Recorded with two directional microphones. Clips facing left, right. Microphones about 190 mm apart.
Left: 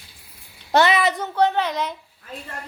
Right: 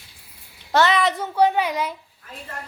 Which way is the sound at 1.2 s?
10° right (ahead or behind).